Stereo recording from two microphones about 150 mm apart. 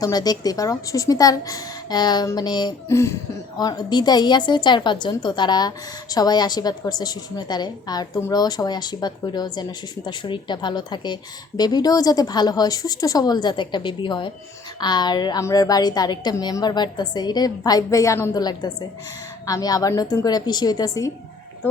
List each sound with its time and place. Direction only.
0.0 s a woman's voice: 25° left (ahead or behind)